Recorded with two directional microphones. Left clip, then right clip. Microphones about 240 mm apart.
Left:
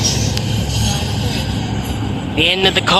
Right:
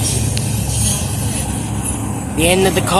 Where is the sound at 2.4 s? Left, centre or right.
Centre.